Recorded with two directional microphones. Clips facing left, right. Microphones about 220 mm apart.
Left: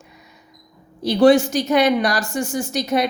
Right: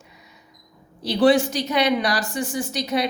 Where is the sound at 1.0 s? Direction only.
45° left (ahead or behind).